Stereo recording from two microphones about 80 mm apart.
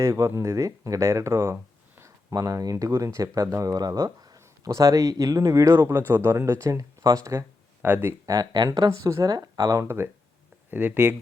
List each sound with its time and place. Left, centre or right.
0.0 s speech: right
2.3 s speech: right
7.8 s speech: right
8.3 s speech: right
8.9 s speech: right
9.2 s speech: right
9.8 s speech: right
10.7 s speech: centre